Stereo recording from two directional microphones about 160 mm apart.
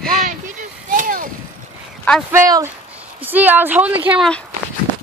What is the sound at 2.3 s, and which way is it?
Speech, 20° right (ahead or behind).